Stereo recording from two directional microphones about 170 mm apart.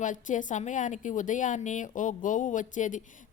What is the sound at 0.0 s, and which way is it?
A woman's voice, 50° left (ahead or behind).